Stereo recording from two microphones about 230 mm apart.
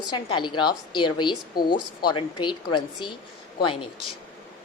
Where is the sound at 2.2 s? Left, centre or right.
Left.